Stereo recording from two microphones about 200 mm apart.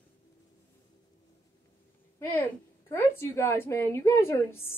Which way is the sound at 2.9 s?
15° left (ahead or behind).